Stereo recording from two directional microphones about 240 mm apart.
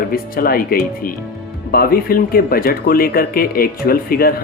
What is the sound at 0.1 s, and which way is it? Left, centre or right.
Speech, left.